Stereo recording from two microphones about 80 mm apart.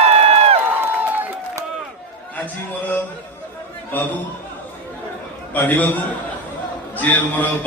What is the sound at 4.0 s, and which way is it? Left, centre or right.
Speech, left.